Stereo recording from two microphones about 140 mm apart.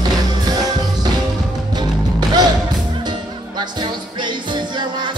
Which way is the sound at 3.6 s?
30° right (ahead or behind).